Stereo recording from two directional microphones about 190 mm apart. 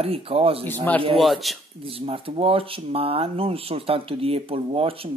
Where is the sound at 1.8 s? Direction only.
30° right (ahead or behind).